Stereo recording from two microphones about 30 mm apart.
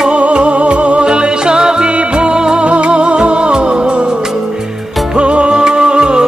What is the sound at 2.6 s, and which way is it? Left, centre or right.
Music, right.